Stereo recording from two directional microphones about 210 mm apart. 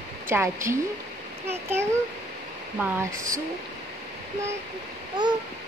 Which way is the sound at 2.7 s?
10° right (ahead or behind).